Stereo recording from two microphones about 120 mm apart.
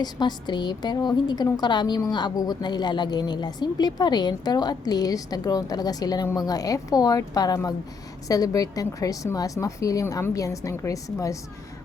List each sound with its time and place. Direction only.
0.0 s a woman's voice: 35° left (ahead or behind)